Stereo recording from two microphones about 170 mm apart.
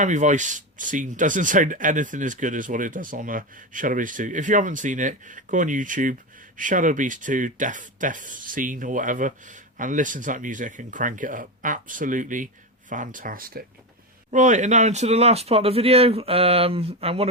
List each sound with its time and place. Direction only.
0.0 s speech: 45° right (ahead or behind)
14.3 s speech: 45° right (ahead or behind)